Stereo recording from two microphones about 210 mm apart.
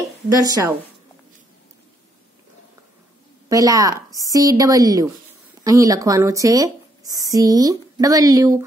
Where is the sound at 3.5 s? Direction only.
15° right (ahead or behind).